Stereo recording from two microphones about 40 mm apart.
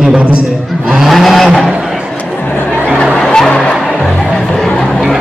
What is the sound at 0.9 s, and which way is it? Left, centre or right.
Vehicle, centre.